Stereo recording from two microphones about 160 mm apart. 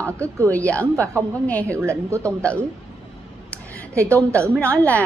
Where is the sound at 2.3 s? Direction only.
10° left (ahead or behind).